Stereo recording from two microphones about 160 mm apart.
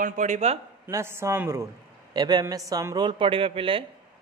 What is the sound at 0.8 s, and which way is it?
Speech, 15° right (ahead or behind).